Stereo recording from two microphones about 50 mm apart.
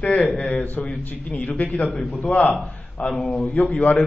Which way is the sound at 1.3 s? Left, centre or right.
Left.